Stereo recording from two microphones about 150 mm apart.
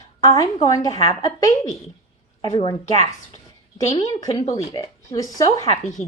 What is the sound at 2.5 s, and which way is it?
Speech, 40° left (ahead or behind).